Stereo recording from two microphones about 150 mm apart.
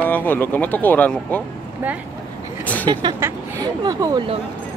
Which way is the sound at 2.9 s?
30° right (ahead or behind).